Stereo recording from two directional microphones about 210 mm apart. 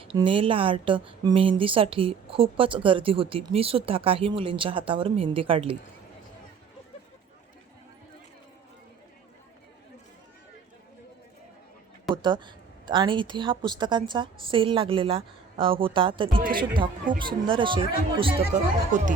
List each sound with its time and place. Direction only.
0.0 s a woman's voice: 25° right (ahead or behind)
12.1 s a woman's voice: 20° right (ahead or behind)
16.4 s speech: 40° right (ahead or behind)
17.2 s a woman's voice: 25° right (ahead or behind)
18.9 s speech: 35° right (ahead or behind)